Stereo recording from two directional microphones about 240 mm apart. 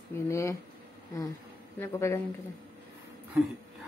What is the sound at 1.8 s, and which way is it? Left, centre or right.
Speech, centre.